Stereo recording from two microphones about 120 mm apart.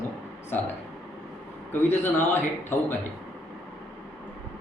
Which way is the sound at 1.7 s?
20° left (ahead or behind).